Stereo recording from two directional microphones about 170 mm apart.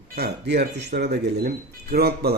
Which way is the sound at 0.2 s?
75° right (ahead or behind).